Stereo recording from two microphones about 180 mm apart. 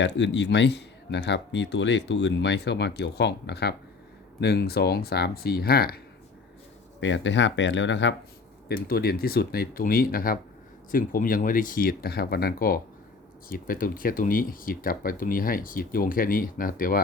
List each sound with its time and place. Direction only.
0.0 s speech: 80° left; by 6.0 s 60° left (ahead or behind)
7.0 s speech: 90° left
8.6 s speech: 60° left (ahead or behind)